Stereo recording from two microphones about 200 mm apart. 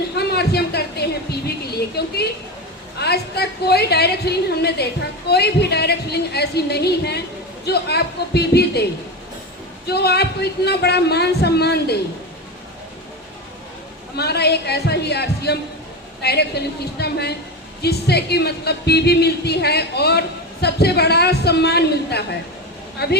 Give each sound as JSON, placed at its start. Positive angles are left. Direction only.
{"t": 0.2, "sound": "a sound", "side_deg": 55}
{"t": 3.0, "sound": "a woman's voice", "side_deg": 55}
{"t": 9.8, "sound": "speech", "side_deg": 55}
{"t": 14.2, "sound": "a woman's voice", "side_deg": 55}